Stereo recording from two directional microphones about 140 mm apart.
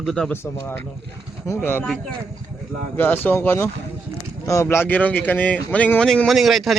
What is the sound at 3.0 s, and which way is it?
Speech, 15° left (ahead or behind).